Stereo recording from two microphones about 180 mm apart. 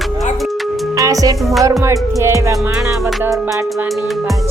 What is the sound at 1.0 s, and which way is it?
Music, 20° right (ahead or behind).